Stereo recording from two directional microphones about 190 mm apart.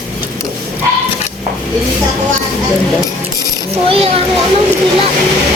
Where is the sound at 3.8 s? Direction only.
30° right (ahead or behind).